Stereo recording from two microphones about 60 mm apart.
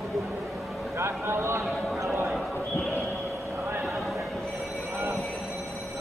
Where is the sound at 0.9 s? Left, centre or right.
Right.